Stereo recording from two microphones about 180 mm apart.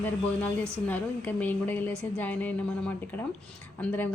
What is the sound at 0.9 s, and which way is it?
A woman's voice, 10° left (ahead or behind).